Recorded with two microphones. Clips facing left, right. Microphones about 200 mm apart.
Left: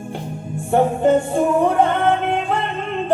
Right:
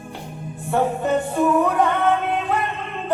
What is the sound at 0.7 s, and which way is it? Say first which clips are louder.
Music: left 5 dB; 30° left (ahead or behind).